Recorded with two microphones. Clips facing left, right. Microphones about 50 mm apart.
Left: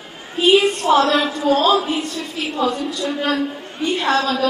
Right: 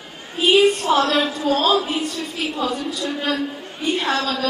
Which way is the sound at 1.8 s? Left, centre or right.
Centre.